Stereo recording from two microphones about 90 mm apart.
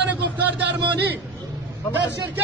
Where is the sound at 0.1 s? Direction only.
15° right (ahead or behind).